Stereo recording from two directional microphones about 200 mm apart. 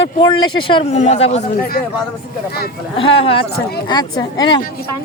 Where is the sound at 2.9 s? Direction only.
25° left (ahead or behind).